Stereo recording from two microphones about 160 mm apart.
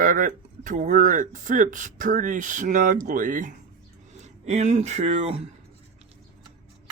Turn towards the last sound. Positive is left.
turn(degrees=-40)  # may be behind; listen again after turning